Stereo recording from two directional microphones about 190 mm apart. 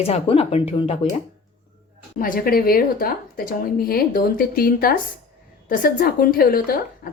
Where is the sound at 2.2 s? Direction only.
50° left (ahead or behind).